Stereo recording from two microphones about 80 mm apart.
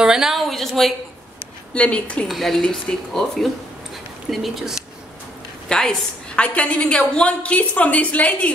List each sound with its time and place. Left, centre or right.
0.0 s a sound: centre
1.7 s a woman's voice: centre
2.2 s speech: centre
5.7 s a woman's voice: centre